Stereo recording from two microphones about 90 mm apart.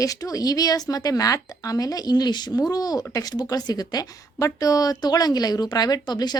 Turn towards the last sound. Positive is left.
turn(degrees=50)  # may be behind; listen again after turning